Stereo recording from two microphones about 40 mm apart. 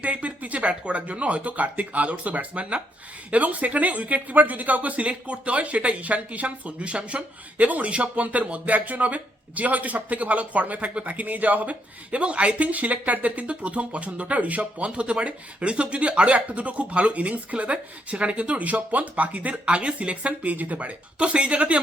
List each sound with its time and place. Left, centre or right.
0.0 s speech: right